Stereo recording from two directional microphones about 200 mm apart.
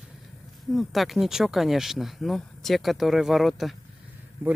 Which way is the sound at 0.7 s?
Centre (ahead or behind).